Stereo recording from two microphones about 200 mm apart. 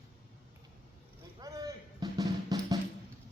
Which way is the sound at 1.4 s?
15° right (ahead or behind).